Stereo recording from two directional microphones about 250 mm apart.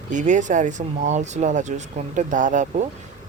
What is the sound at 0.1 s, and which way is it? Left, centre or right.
A man's voice, right.